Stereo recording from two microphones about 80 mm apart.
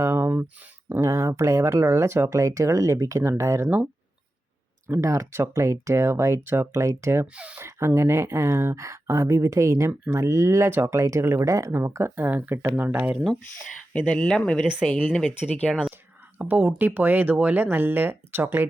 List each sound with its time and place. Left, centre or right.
0.0 s a sound: right
1.0 s speech: right
4.9 s speech: right
7.3 s speech: centre
7.6 s speech: right
13.9 s speech: centre
16.4 s speech: right